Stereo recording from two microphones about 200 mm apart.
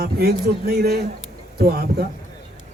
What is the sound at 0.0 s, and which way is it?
Speech, 50° right (ahead or behind).